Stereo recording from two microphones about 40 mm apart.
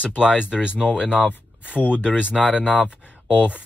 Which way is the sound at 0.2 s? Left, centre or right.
Right.